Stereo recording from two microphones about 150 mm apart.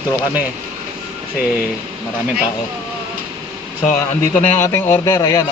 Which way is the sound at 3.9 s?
55° left (ahead or behind).